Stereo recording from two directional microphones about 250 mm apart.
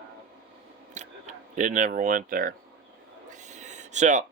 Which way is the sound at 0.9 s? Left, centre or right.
Right.